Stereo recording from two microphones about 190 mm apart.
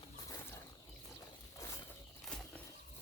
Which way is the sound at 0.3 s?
15° left (ahead or behind).